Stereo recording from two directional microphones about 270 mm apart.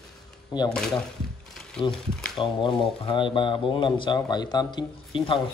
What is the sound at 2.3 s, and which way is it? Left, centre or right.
Speech, centre.